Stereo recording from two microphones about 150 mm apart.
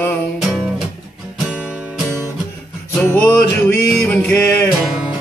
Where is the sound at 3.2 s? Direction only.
10° left (ahead or behind).